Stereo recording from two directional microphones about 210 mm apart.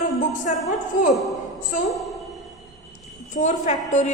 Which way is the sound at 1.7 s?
40° left (ahead or behind).